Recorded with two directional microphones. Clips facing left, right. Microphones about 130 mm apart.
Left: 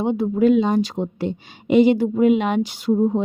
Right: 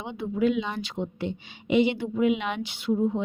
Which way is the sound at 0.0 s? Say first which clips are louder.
Left 8 dB; 40° left (ahead or behind).